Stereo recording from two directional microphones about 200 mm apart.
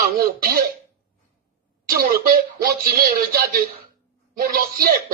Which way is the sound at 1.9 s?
50° right (ahead or behind).